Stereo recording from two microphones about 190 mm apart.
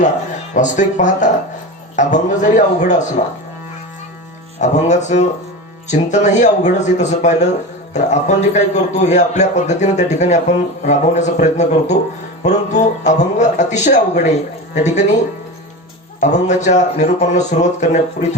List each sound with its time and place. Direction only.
0.5 s a man's voice: 40° left (ahead or behind)
4.6 s a man's voice: 40° left (ahead or behind)
16.2 s a man's voice: 40° left (ahead or behind)